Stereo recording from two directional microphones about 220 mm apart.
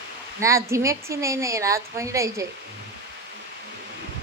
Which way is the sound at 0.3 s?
15° right (ahead or behind).